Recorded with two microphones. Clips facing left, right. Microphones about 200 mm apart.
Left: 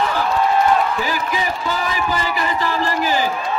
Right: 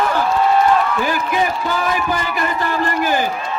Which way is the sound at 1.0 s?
55° right (ahead or behind).